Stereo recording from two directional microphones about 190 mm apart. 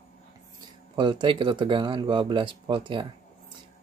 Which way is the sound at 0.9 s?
25° right (ahead or behind).